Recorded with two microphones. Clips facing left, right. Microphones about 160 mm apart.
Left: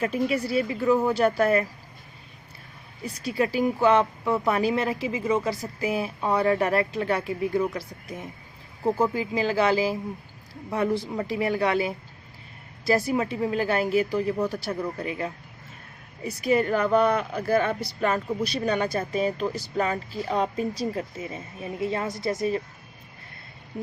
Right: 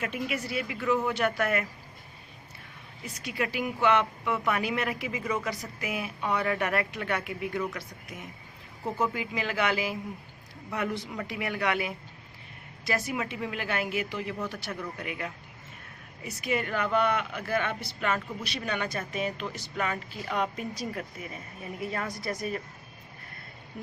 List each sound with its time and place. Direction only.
0.0 s speech: 35° left (ahead or behind)
3.0 s speech: 35° left (ahead or behind)